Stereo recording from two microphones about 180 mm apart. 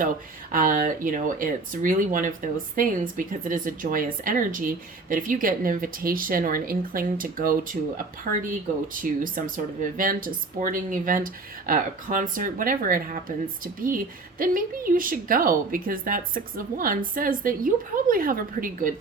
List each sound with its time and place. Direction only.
0.5 s speech: 50° right (ahead or behind)